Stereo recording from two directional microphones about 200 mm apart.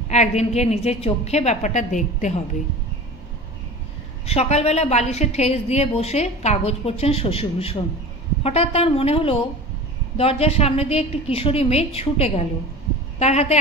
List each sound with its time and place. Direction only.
0.1 s a woman's voice: 35° left (ahead or behind)
4.3 s a woman's voice: 30° left (ahead or behind)